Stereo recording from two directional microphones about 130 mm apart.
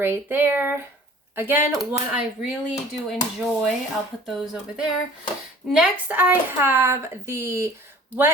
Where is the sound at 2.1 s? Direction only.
5° right (ahead or behind).